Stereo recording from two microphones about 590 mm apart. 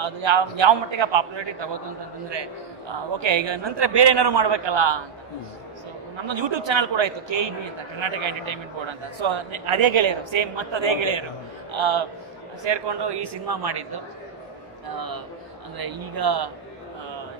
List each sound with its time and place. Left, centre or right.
0.0 s a man's voice: right
6.2 s a man's voice: right